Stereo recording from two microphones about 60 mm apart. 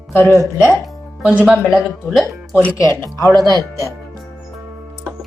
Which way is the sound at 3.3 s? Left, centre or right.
Right.